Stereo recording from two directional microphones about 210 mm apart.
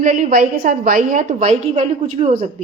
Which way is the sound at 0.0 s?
40° right (ahead or behind).